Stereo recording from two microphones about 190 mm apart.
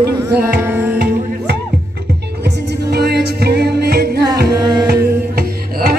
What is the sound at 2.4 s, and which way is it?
Music, 60° right (ahead or behind).